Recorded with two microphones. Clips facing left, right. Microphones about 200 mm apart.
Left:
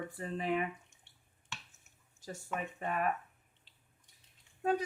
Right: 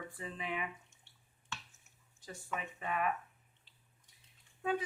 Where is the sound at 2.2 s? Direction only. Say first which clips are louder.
Left 3 dB; 45° left (ahead or behind).